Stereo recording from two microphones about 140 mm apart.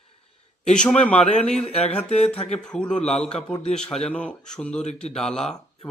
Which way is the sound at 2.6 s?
5° left (ahead or behind).